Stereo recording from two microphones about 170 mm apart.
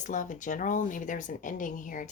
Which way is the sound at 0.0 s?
50° left (ahead or behind).